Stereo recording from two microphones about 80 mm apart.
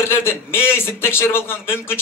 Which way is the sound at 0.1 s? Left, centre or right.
Left.